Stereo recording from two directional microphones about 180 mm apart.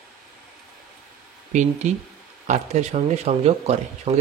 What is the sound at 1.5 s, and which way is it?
Speech, 40° right (ahead or behind).